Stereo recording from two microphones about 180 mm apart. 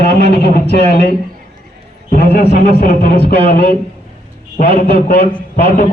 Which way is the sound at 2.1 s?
65° left (ahead or behind).